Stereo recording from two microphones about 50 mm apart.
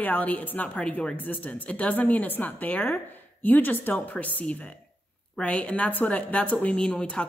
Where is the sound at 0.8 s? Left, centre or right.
Left.